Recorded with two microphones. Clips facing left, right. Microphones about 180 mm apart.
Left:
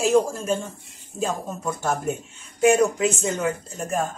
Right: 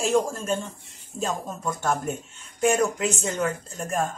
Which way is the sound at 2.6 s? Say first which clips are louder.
Left 4 dB; centre (ahead or behind).